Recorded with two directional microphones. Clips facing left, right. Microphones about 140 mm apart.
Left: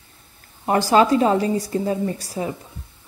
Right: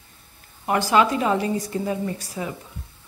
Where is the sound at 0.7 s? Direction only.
35° left (ahead or behind).